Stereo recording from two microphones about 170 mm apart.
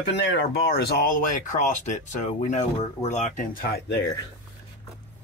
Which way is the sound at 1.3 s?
45° left (ahead or behind).